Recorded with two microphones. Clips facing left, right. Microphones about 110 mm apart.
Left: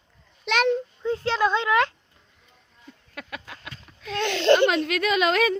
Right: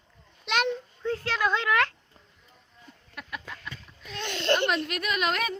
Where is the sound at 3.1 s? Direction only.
90° left.